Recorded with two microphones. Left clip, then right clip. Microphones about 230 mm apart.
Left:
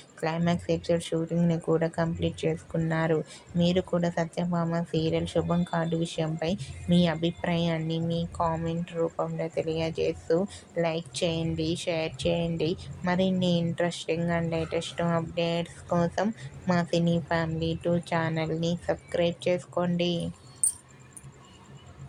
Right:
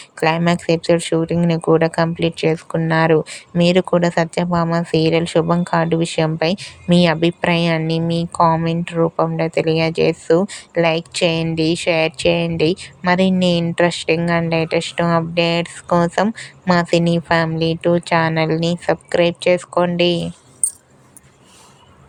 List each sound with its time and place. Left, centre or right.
0.2 s speech: right